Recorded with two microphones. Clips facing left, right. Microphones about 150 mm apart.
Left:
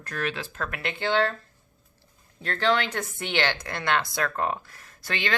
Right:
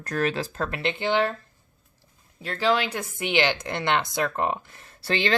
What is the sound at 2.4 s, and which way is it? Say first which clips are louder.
Speech: right 1 dB; 10° right (ahead or behind).